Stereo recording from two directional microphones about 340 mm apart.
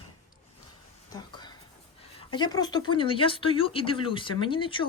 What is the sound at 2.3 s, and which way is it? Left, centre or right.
Speech, centre.